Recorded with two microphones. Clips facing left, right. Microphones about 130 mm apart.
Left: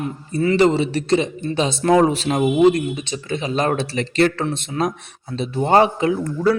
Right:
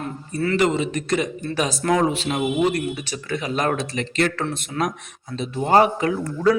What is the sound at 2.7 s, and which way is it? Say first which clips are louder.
Speech: left 2 dB; 20° left (ahead or behind).